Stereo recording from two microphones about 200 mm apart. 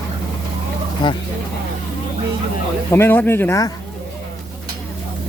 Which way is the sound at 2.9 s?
10° left (ahead or behind).